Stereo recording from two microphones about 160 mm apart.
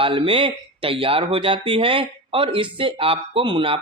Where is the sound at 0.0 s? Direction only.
30° right (ahead or behind).